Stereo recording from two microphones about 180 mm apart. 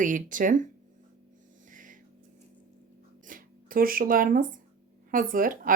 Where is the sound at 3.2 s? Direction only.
50° right (ahead or behind).